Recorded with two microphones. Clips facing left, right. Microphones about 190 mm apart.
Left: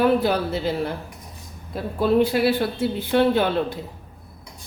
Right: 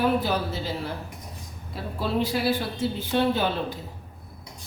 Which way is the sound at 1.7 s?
50° left (ahead or behind).